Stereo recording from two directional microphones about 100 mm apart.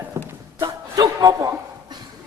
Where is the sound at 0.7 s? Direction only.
40° right (ahead or behind).